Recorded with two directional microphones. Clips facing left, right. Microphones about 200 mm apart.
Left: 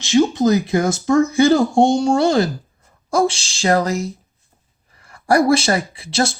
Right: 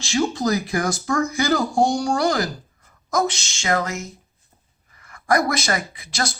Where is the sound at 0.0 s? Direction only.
20° left (ahead or behind).